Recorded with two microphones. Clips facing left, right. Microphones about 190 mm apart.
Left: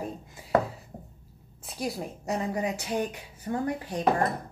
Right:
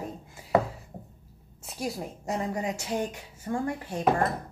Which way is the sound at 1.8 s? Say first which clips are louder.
Left 1 dB; 20° left (ahead or behind).